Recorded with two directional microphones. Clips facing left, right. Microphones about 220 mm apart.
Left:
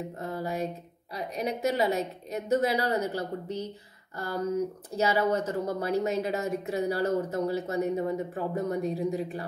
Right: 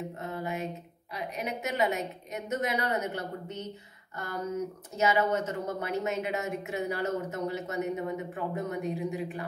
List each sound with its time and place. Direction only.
0.2 s a woman's voice: 35° left (ahead or behind)
4.9 s a woman's voice: 35° left (ahead or behind)